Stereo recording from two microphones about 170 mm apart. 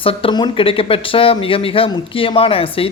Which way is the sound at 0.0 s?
35° left (ahead or behind).